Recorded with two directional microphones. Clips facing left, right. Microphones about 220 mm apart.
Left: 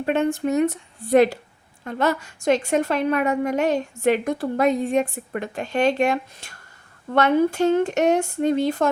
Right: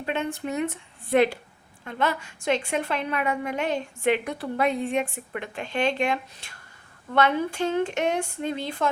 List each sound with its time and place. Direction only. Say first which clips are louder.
0.0 s a woman's voice: left 8 dB; 45° left (ahead or behind)